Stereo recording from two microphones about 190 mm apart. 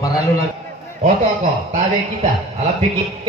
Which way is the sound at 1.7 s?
30° right (ahead or behind).